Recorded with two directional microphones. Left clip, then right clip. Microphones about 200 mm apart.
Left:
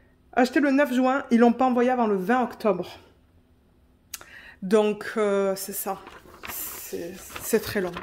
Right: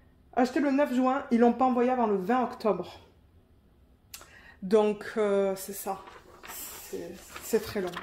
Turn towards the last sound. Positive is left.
turn(degrees=40)  # may be behind; listen again after turning